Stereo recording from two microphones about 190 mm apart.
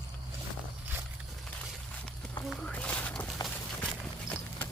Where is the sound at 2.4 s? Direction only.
5° left (ahead or behind).